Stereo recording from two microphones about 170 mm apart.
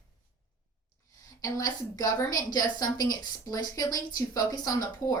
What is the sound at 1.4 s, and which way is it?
A woman's voice, 20° left (ahead or behind).